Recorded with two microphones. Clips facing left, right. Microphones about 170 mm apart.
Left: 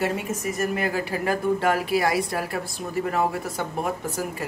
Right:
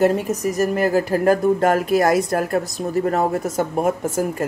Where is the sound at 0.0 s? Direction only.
40° right (ahead or behind).